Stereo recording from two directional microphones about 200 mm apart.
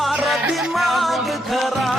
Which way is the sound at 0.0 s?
Centre (ahead or behind).